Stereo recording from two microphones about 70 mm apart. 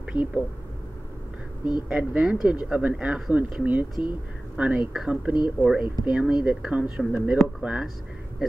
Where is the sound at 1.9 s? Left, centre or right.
Centre.